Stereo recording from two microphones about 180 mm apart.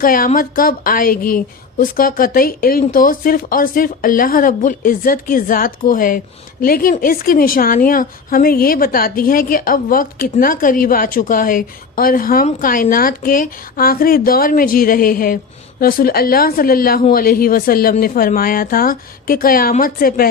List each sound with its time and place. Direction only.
0.0 s a woman's voice: 50° left (ahead or behind)